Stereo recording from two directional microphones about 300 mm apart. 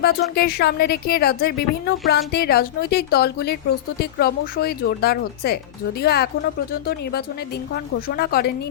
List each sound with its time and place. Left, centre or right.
0.0 s a woman's voice: left
8.0 s a woman's voice: left